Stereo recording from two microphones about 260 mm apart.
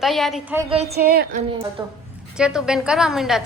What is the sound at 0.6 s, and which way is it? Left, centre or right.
Speech, right.